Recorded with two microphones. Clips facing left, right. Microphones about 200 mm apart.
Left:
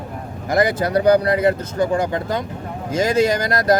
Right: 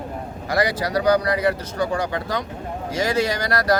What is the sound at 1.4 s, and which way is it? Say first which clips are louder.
Speech: left 4 dB; 25° left (ahead or behind).